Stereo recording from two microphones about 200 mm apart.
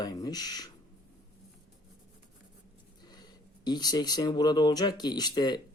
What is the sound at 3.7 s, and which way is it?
Speech, 20° left (ahead or behind).